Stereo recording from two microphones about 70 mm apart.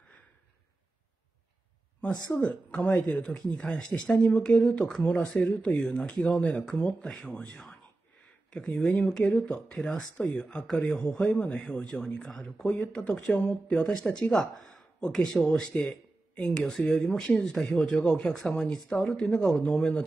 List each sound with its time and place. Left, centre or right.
2.4 s speech: centre
10.1 s speech: centre